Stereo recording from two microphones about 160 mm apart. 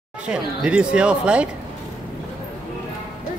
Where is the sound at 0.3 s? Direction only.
5° right (ahead or behind).